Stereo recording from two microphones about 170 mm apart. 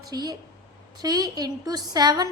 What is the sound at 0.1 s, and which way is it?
A woman's voice, 25° right (ahead or behind).